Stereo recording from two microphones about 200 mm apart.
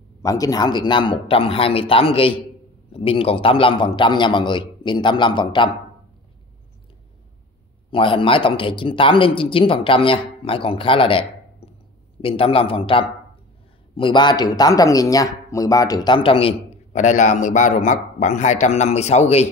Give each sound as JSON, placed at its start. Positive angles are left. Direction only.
{"t": 0.2, "sound": "speech", "side_deg": 15}
{"t": 7.9, "sound": "speech", "side_deg": 25}